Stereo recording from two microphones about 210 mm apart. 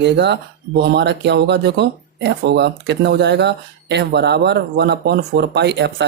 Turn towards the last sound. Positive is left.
turn(degrees=-55)  # may be behind; listen again after turning